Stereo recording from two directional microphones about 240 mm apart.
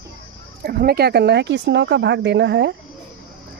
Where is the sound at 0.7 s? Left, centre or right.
Right.